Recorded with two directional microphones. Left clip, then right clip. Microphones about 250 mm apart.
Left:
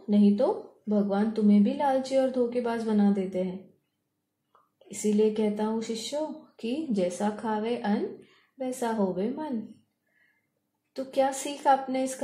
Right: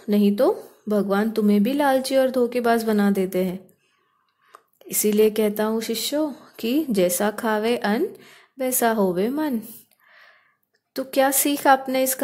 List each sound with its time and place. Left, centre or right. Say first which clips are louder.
0.1 s a woman's voice: right 5 dB; right
5.1 s a woman's voice: right 6 dB; right
10.9 s a woman's voice: right 6 dB; right